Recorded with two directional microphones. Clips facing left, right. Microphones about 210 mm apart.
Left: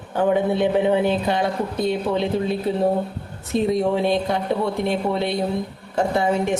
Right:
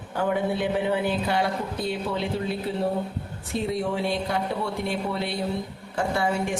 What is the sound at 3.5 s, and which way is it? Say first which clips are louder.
A woman's voice: left 7 dB; 20° left (ahead or behind).